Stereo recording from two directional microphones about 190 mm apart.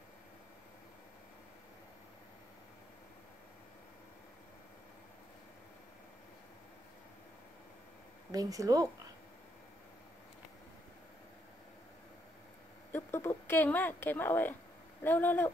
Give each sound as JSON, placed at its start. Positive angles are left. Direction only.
{"t": 8.3, "sound": "speech", "side_deg": -20}
{"t": 12.9, "sound": "a sound", "side_deg": 10}
{"t": 15.0, "sound": "speech", "side_deg": 10}